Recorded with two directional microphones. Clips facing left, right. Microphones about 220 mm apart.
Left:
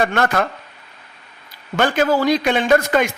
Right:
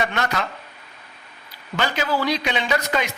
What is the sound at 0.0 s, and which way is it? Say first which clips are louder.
Speech: left 6 dB; 50° left (ahead or behind).